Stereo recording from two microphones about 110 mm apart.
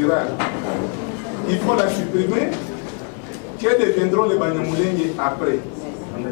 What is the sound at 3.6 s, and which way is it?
A man's voice, 20° left (ahead or behind).